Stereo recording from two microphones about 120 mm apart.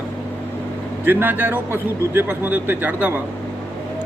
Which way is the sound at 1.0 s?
15° right (ahead or behind).